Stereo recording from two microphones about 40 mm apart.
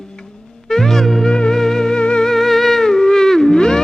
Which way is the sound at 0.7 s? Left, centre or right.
Centre.